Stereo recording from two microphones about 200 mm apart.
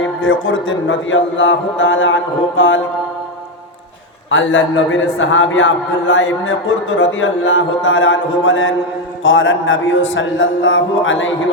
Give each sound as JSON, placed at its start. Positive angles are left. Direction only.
{"t": 0.0, "sound": "a man's voice", "side_deg": 75}
{"t": 4.3, "sound": "a man's voice", "side_deg": 70}